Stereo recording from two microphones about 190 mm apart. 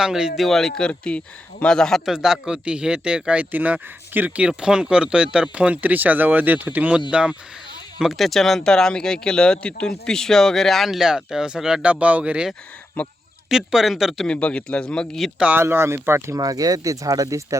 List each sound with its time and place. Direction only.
0.0 s a man's voice: 5° right (ahead or behind)
13.0 s speech: 5° left (ahead or behind)
13.5 s a man's voice: 5° right (ahead or behind)